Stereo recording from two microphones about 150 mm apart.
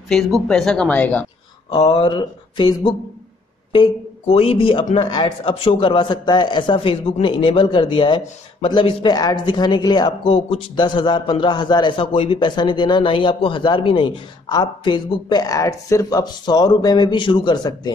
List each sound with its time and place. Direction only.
0.1 s speech: 5° left (ahead or behind)
1.9 s a man's voice: 30° left (ahead or behind)